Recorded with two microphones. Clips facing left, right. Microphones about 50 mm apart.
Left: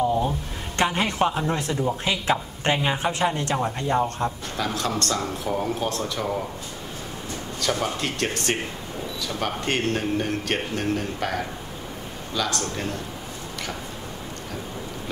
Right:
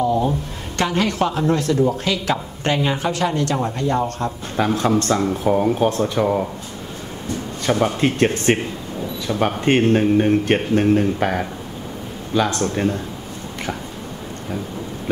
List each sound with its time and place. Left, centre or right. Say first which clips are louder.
0.7 s speech: right 3 dB; left
4.6 s speech: right 8 dB; right
7.6 s speech: right 7 dB; right